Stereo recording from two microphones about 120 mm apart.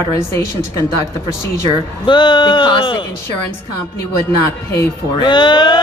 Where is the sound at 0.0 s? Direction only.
20° left (ahead or behind).